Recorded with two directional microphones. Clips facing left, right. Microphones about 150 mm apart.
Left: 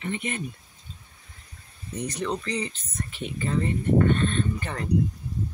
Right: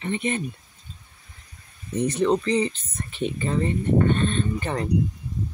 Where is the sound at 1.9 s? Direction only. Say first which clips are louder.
Right 8 dB; 25° right (ahead or behind).